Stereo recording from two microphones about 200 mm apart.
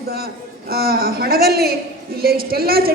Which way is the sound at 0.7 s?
50° right (ahead or behind).